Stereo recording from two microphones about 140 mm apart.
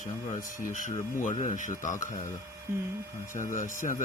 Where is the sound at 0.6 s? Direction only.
65° left (ahead or behind).